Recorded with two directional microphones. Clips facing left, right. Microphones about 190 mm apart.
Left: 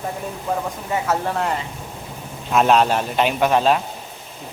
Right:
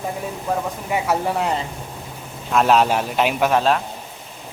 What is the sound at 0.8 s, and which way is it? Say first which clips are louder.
Speech: right 1 dB; 15° right (ahead or behind).